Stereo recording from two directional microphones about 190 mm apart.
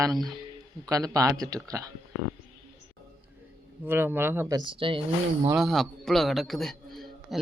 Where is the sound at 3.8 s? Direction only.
10° right (ahead or behind); by 5.5 s 30° right (ahead or behind).